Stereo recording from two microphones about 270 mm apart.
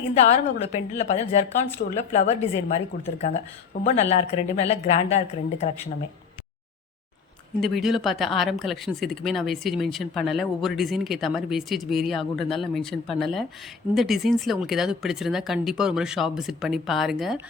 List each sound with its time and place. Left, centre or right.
0.3 s speech: left
7.6 s speech: centre